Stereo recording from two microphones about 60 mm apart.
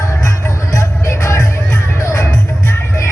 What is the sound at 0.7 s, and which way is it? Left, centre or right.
Music, left.